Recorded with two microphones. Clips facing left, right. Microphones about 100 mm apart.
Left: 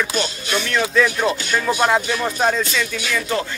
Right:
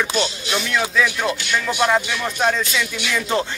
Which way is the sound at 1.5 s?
40° left (ahead or behind).